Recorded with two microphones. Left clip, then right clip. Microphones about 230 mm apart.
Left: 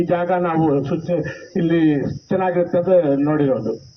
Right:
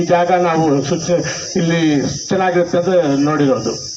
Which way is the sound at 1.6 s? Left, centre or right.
Right.